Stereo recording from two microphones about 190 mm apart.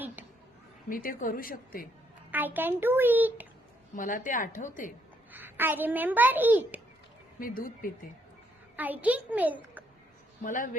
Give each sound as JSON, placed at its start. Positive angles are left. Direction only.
{"t": 0.9, "sound": "a woman's voice", "side_deg": 45}
{"t": 2.3, "sound": "a child's voice", "side_deg": -10}
{"t": 3.9, "sound": "a woman's voice", "side_deg": 45}
{"t": 5.3, "sound": "a child's voice", "side_deg": -10}
{"t": 7.3, "sound": "a woman's voice", "side_deg": 45}
{"t": 8.7, "sound": "a child's voice", "side_deg": -10}
{"t": 10.4, "sound": "a woman's voice", "side_deg": 45}